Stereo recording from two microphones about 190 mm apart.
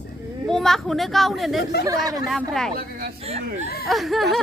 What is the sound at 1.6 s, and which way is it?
Speech, 60° left (ahead or behind).